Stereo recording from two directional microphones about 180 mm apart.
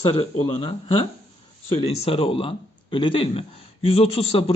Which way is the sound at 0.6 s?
30° left (ahead or behind).